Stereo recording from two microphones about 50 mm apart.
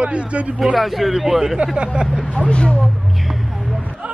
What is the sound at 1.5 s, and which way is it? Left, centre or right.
Speech, right.